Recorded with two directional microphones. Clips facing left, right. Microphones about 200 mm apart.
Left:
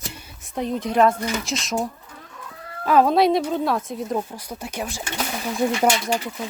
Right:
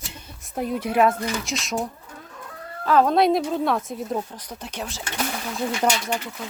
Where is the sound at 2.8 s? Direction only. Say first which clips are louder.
Left 1 dB; 10° left (ahead or behind).